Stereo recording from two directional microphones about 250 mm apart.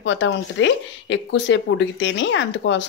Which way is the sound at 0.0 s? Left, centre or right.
Left.